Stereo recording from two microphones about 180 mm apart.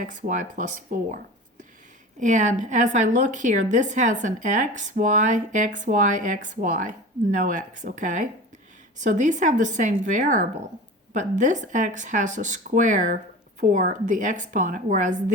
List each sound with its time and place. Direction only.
0.0 s a woman's voice: 45° right (ahead or behind)